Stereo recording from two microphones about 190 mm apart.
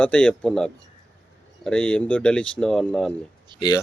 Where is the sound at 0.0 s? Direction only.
5° left (ahead or behind).